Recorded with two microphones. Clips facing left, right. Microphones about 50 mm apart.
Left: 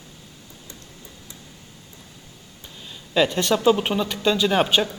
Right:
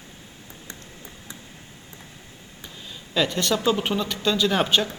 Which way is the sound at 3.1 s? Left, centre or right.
Centre.